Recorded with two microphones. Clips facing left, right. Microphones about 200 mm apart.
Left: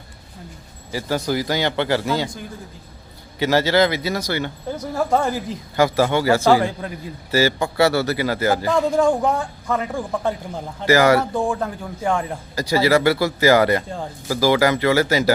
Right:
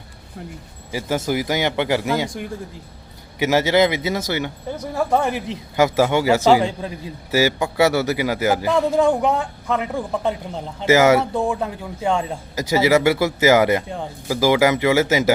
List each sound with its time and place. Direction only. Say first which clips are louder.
0.9 s a man's voice: even; 15° right (ahead or behind)
3.3 s a man's voice: even; 15° right (ahead or behind)